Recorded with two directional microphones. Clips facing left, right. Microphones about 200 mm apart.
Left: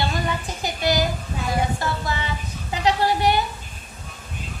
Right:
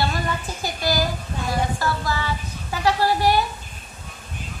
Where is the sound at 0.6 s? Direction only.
20° left (ahead or behind).